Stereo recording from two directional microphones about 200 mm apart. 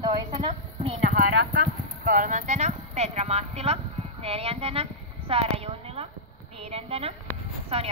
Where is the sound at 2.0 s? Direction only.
40° right (ahead or behind).